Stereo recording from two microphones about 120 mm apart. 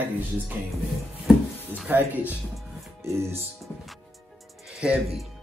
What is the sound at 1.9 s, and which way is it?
Speech, 15° right (ahead or behind).